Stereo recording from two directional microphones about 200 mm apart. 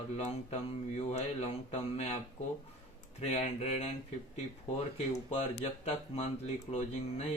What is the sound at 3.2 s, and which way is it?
Speech, 30° left (ahead or behind).